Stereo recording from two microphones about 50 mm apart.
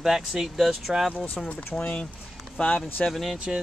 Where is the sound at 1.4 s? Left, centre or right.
Centre.